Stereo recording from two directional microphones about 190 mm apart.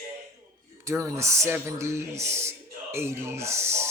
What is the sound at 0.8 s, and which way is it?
Speech, 15° right (ahead or behind).